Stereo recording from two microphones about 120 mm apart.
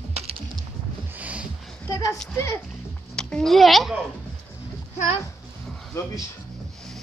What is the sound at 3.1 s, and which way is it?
Speech, 5° left (ahead or behind).